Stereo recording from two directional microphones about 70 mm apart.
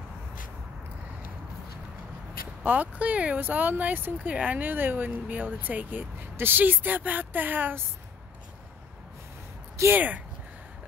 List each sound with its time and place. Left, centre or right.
2.6 s speech: right
9.9 s speech: right